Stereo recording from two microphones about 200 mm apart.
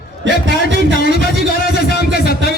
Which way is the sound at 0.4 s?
65° right (ahead or behind).